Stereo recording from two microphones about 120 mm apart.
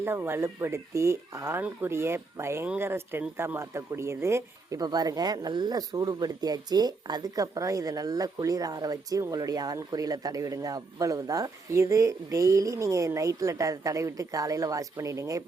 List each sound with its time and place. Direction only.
0.0 s speech: 20° right (ahead or behind)